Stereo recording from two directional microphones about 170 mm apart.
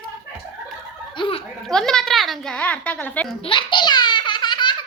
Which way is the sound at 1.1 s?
30° left (ahead or behind).